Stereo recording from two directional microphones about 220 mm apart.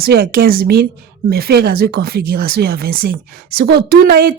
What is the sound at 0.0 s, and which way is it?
Speech, 45° right (ahead or behind).